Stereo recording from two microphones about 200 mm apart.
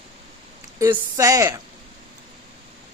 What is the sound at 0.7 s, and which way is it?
Speech, 15° right (ahead or behind).